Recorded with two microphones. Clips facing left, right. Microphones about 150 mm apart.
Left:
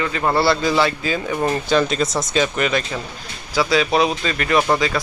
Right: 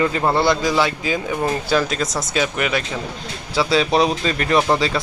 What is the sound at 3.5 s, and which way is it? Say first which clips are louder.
Speech: even; 30° right (ahead or behind).